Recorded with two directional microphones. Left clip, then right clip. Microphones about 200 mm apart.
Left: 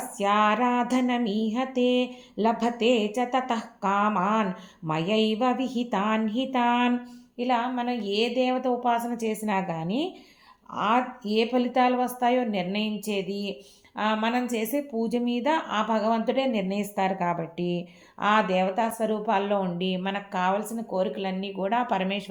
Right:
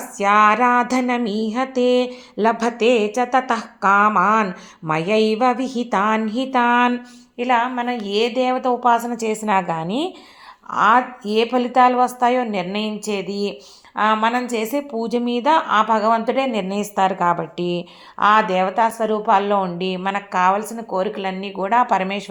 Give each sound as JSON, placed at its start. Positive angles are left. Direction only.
{"t": 0.2, "sound": "speech", "side_deg": -25}